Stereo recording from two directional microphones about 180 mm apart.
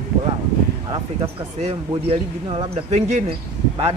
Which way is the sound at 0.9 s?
30° right (ahead or behind).